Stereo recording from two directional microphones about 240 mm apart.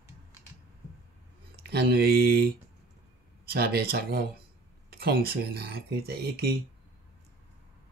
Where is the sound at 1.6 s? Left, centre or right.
Right.